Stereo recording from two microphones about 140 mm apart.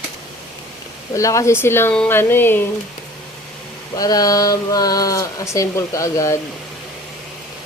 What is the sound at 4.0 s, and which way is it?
Speech, 25° left (ahead or behind).